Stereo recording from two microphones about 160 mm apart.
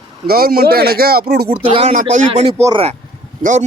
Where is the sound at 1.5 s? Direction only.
35° right (ahead or behind).